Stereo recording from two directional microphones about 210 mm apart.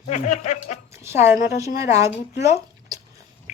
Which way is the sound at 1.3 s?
15° right (ahead or behind).